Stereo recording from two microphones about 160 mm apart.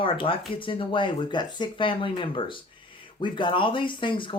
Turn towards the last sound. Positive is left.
turn(degrees=30)  # may be behind; listen again after turning